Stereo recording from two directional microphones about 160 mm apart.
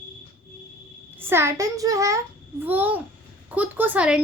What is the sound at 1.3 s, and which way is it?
A child's voice, 15° right (ahead or behind).